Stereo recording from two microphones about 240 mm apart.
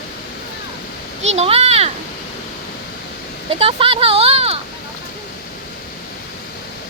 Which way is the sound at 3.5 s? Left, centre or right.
Right.